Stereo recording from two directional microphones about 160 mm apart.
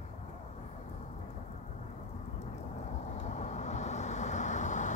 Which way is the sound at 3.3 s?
45° left (ahead or behind).